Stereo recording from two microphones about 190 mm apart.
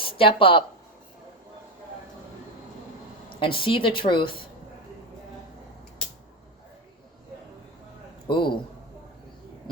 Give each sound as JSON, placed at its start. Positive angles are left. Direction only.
{"t": 0.0, "sound": "speech", "side_deg": 30}
{"t": 3.4, "sound": "a woman's voice", "side_deg": 25}
{"t": 8.3, "sound": "a woman's voice", "side_deg": 25}